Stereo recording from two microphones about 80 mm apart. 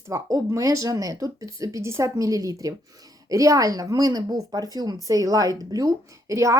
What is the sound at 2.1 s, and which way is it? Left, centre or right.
A woman's voice, right.